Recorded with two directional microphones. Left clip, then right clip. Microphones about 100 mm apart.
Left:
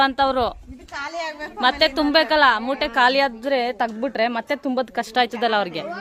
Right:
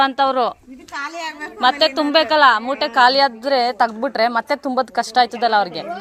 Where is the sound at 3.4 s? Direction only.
90° left.